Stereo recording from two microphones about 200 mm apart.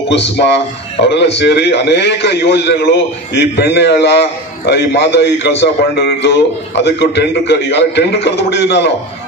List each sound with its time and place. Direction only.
0.1 s a man's voice: 60° left (ahead or behind)